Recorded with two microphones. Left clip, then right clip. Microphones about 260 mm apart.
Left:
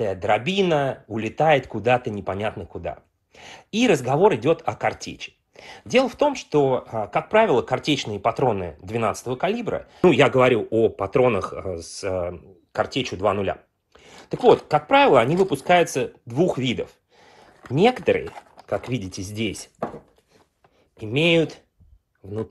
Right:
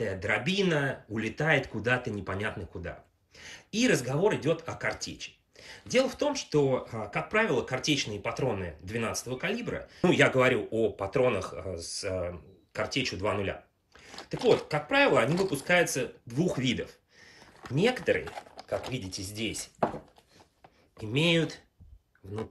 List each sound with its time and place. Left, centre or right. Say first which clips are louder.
0.0 s speech: left 8 dB; centre
21.0 s speech: left 8 dB; centre